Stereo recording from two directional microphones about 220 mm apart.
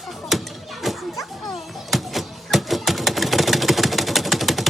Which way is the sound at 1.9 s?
Centre (ahead or behind).